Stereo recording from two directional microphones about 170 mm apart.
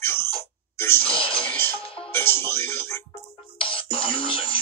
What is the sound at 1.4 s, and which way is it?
Music, 10° left (ahead or behind).